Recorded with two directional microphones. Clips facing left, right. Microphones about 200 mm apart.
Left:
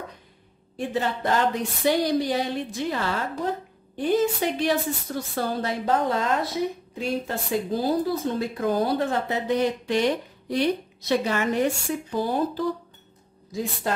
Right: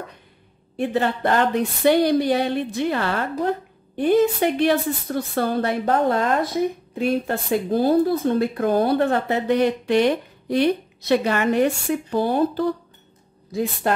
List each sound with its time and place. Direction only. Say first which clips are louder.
0.7 s a woman's voice: right 5 dB; 60° right (ahead or behind)